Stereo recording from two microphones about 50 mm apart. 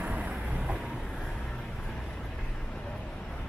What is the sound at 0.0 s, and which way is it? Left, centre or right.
Vehicle, right.